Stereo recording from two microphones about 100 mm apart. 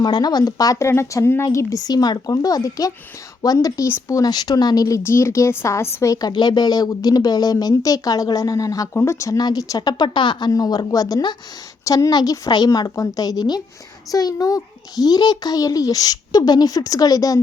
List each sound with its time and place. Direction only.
0.0 s speech: 45° left (ahead or behind); by 1.5 s 25° left (ahead or behind)
1.5 s speech: 40° left (ahead or behind)
10.5 s speech: 40° left (ahead or behind)